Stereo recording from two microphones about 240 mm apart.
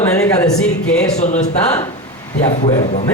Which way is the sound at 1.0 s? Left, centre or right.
Left.